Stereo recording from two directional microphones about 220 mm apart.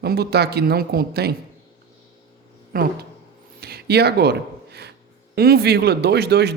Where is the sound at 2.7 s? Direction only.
40° right (ahead or behind).